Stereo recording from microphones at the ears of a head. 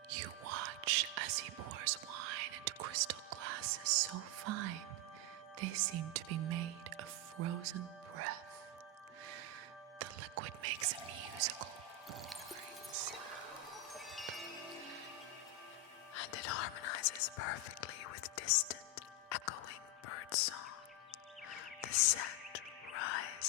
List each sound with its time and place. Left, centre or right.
0.1 s music: right
10.0 s music: right
13.9 s wind chime: centre
16.1 s whispering: left
21.5 s music: left